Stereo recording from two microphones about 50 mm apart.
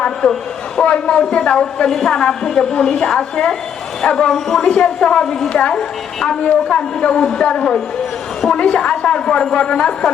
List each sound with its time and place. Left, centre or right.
0.8 s a woman's voice: left
6.4 s a woman's voice: left